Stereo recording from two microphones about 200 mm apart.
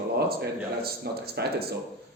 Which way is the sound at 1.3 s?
55° right (ahead or behind).